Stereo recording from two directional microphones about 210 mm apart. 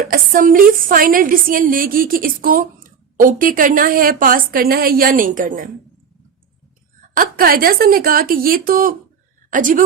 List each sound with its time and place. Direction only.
0.1 s a woman's voice: 40° right (ahead or behind)
7.1 s a woman's voice: 40° right (ahead or behind)